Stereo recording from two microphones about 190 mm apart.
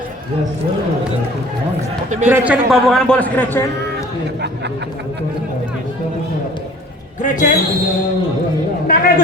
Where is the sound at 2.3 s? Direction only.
5° right (ahead or behind).